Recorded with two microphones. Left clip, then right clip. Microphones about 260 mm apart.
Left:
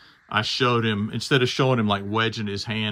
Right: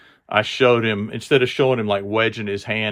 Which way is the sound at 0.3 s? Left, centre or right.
Centre.